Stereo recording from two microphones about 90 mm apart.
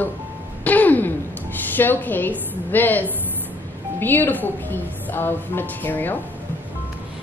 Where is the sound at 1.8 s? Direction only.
20° left (ahead or behind).